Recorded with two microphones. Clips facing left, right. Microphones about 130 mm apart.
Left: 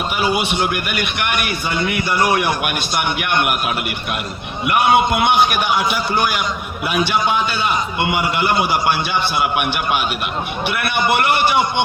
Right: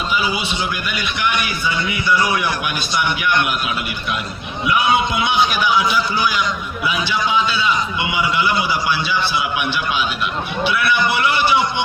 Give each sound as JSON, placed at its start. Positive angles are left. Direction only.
{"t": 0.1, "sound": "a man's voice", "side_deg": 60}